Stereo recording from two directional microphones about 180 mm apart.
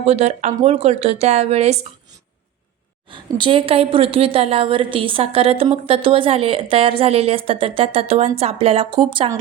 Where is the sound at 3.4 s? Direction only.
30° right (ahead or behind).